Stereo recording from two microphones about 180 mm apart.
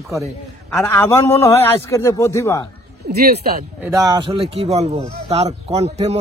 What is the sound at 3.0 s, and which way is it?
Speech, 60° right (ahead or behind).